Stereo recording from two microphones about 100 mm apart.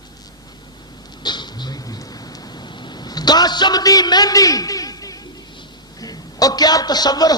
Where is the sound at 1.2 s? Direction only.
45° left (ahead or behind).